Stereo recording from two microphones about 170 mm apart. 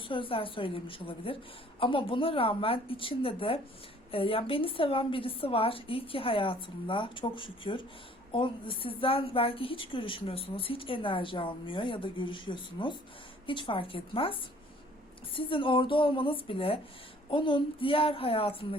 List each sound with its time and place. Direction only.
0.0 s a woman's voice: 30° left (ahead or behind)